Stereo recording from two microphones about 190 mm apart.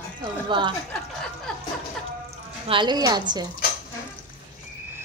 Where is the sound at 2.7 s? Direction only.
25° right (ahead or behind).